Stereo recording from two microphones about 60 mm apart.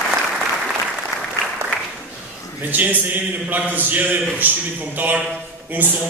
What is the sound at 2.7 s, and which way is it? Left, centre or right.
A man's voice, right.